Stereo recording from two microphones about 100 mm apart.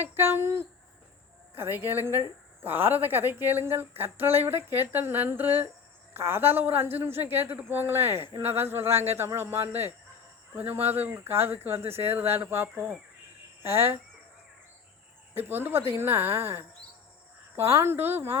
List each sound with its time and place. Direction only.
0.2 s speech: 25° right (ahead or behind)
15.4 s speech: 20° right (ahead or behind)
17.6 s speech: 25° right (ahead or behind)